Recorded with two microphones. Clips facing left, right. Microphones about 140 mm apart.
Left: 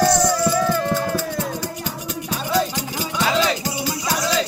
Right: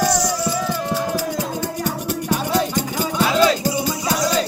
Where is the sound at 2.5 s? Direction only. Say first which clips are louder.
Right 1 dB; 45° right (ahead or behind).